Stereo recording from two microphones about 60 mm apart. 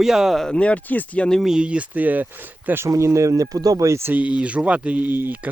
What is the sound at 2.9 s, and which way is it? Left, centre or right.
Speech, right.